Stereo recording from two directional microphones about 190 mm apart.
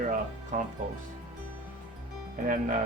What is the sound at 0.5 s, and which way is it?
Speech, 45° right (ahead or behind).